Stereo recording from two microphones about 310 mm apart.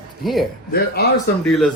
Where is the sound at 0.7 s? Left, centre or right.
Left.